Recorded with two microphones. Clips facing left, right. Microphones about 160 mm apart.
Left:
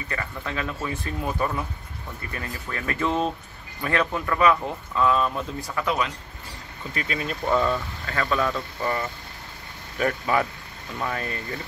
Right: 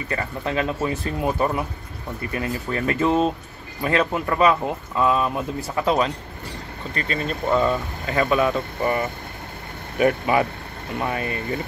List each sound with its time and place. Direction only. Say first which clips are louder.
0.1 s speech: right 6 dB; 30° right (ahead or behind)
5.9 s speech: right 6 dB; 35° right (ahead or behind)
6.9 s speech: right 3 dB; 5° left (ahead or behind)
7.5 s speech: right 2 dB; 15° right (ahead or behind)